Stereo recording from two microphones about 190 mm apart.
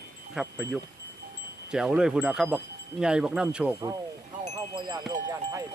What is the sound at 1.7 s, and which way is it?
Chime, 5° right (ahead or behind).